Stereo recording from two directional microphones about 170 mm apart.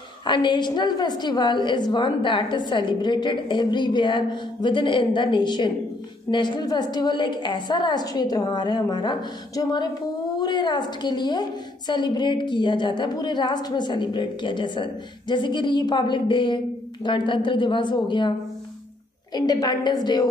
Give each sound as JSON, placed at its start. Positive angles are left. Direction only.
{"t": 0.3, "sound": "a woman's voice", "side_deg": 25}
{"t": 19.3, "sound": "a woman's voice", "side_deg": 25}